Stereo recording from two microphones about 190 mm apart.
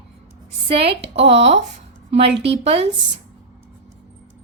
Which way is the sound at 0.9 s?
35° right (ahead or behind).